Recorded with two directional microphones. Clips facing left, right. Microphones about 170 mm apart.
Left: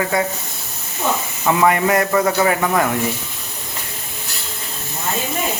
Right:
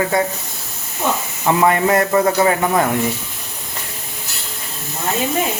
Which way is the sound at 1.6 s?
30° right (ahead or behind).